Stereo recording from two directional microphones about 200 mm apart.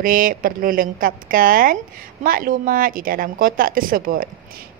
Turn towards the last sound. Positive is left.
turn(degrees=-45)  # may be behind; listen again after turning